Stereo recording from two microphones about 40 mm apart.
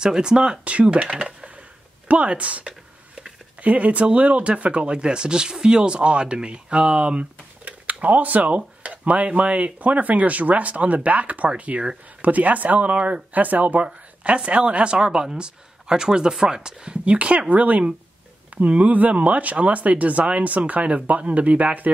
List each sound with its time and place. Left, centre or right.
0.0 s a woman's voice: centre
0.7 s a woman's voice: right
13.8 s a woman's voice: right